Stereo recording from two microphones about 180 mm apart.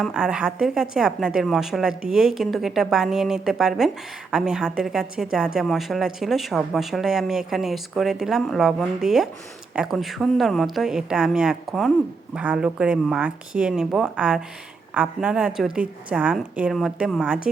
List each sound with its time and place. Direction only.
0.0 s a woman's voice: 5° right (ahead or behind)